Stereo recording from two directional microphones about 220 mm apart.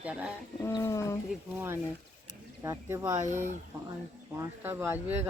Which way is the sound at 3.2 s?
35° right (ahead or behind).